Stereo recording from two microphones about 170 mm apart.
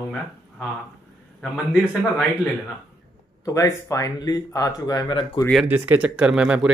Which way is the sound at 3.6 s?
20° left (ahead or behind).